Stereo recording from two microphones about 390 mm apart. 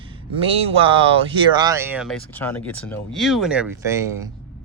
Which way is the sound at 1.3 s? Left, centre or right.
Centre.